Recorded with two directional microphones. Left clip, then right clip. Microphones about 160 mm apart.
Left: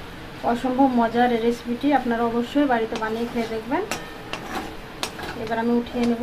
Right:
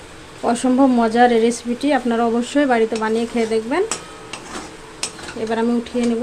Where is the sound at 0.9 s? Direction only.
60° right (ahead or behind).